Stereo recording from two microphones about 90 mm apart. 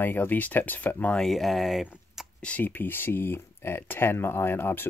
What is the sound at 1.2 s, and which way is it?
Speech, centre (ahead or behind).